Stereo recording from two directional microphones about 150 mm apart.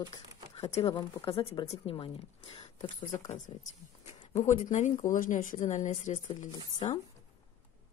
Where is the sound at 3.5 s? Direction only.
35° left (ahead or behind).